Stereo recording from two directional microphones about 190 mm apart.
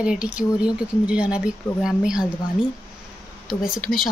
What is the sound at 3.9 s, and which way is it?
Speech, centre (ahead or behind).